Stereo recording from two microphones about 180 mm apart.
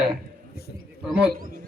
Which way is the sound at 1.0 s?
5° right (ahead or behind).